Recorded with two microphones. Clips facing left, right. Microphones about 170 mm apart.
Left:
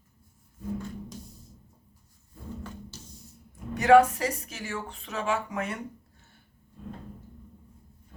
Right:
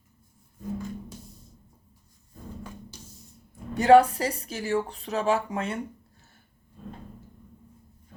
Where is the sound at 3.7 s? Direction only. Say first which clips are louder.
Right 2 dB; 30° right (ahead or behind).